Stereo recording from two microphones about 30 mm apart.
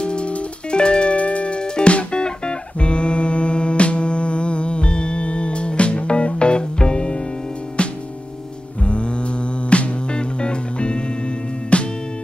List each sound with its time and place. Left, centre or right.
0.0 s music: left
1.1 s music: left
8.8 s music: left